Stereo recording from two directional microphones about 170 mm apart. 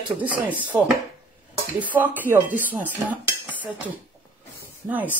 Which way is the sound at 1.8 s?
10° right (ahead or behind).